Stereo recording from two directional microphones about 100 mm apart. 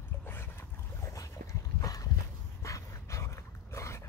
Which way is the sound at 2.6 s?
30° left (ahead or behind).